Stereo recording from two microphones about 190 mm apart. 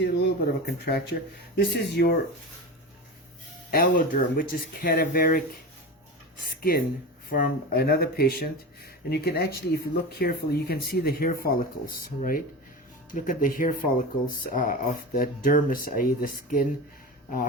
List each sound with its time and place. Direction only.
0.0 s speech: 60° left (ahead or behind)
3.7 s speech: 50° left (ahead or behind)
6.6 s speech: 50° left (ahead or behind)